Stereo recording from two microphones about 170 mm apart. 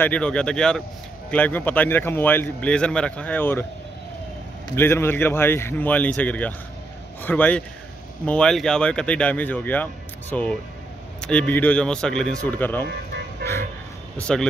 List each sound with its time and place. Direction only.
0.0 s speech: 5° left (ahead or behind)
4.7 s speech: 15° left (ahead or behind)
12.8 s vehicle: 75° right (ahead or behind)
14.1 s speech: 5° left (ahead or behind)